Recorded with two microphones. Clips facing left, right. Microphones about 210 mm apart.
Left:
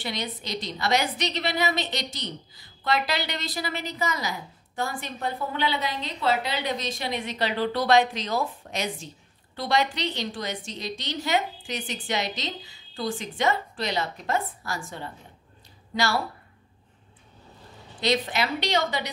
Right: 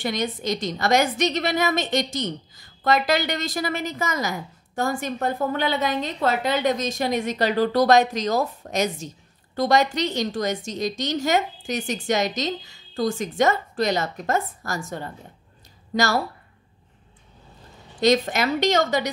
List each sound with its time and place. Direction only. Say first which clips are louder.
0.0 s a woman's voice: right 7 dB; 45° right (ahead or behind)
18.0 s a woman's voice: right 6 dB; 45° right (ahead or behind)